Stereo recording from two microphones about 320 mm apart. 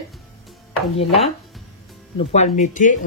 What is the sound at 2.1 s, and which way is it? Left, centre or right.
Speech, left.